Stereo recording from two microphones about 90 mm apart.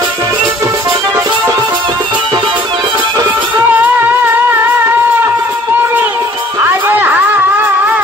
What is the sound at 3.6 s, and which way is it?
Music, 20° right (ahead or behind).